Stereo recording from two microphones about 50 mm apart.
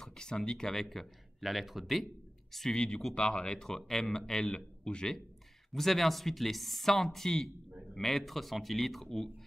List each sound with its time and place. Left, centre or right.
0.0 s speech: centre
5.7 s speech: centre